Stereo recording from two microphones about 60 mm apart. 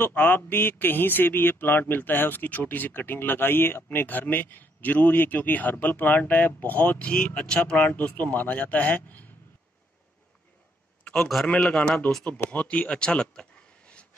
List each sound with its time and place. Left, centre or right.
0.0 s speech: left
11.4 s a man's voice: centre